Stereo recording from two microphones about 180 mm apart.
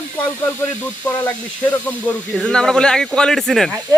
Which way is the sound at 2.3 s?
5° left (ahead or behind).